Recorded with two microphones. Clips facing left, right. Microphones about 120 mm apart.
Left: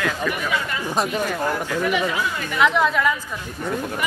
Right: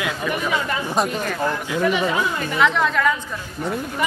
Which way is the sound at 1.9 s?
30° right (ahead or behind).